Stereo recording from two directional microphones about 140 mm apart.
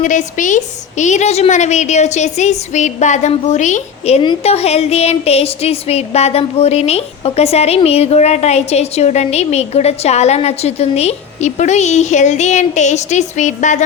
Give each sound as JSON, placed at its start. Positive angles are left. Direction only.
{"t": 0.0, "sound": "a woman's voice", "side_deg": 65}